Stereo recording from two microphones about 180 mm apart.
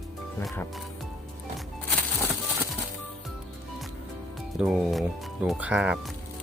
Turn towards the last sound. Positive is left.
turn(degrees=-5)  # may be behind; listen again after turning